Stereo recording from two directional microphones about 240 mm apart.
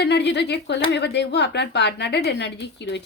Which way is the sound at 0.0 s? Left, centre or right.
Left.